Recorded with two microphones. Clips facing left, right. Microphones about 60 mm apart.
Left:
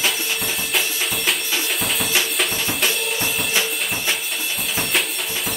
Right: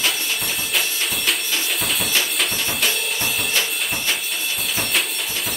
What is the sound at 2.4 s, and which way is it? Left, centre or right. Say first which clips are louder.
Drum: left 1 dB; centre.